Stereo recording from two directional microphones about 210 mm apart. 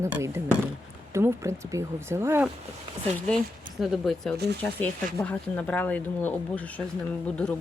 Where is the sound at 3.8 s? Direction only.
Centre (ahead or behind).